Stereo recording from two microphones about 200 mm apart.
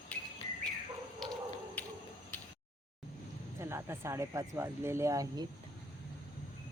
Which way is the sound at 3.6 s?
15° right (ahead or behind).